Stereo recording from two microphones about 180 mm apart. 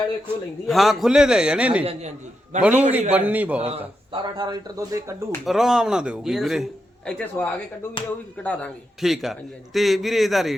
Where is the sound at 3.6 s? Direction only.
30° right (ahead or behind).